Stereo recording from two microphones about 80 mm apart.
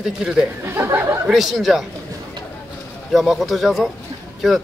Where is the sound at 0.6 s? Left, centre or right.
Right.